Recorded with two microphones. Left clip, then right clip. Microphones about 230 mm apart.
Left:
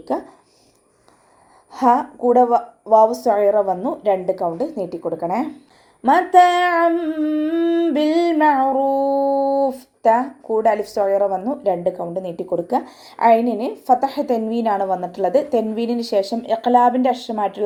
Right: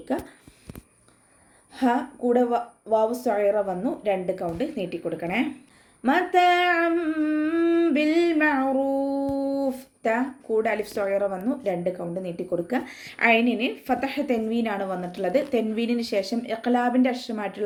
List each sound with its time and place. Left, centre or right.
1.7 s a woman's voice: centre
6.0 s humming: centre
10.9 s speech: left
11.3 s a woman's voice: centre